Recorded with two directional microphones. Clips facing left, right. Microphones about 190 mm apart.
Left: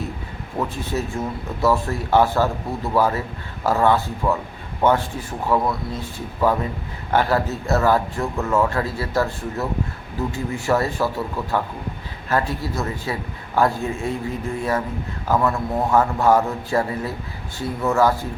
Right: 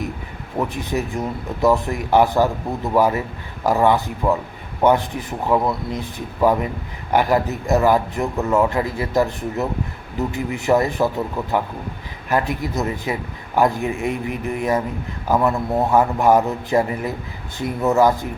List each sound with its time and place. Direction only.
0.6 s speech: 15° right (ahead or behind)